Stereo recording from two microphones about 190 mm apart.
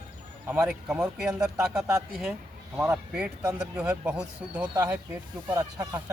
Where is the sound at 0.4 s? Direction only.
10° right (ahead or behind).